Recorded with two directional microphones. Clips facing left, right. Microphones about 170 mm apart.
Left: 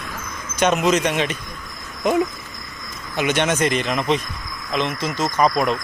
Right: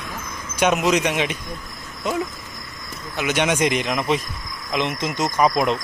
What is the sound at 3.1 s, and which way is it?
Speech, 10° right (ahead or behind).